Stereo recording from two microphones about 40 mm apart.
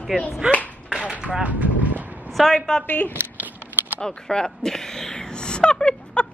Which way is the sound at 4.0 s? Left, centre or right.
Centre.